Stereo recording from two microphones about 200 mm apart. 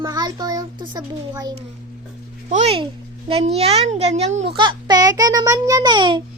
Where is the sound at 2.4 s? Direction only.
35° right (ahead or behind).